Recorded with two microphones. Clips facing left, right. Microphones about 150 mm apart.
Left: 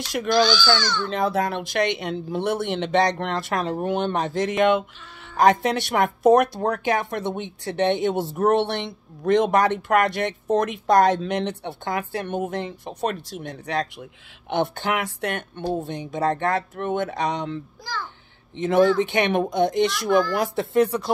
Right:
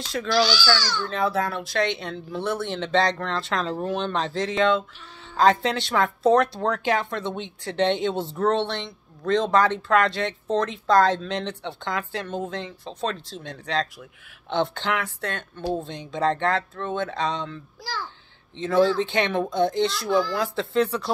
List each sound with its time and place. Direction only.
0.3 s speech: 50° left (ahead or behind)
1.0 s speech: 15° left (ahead or behind)
18.6 s speech: 15° left (ahead or behind)